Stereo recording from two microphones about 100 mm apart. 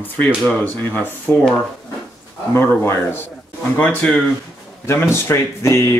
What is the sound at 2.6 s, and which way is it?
Speech, 20° left (ahead or behind).